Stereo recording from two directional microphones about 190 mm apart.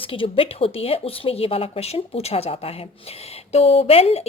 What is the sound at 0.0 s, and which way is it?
A woman's voice, 30° left (ahead or behind).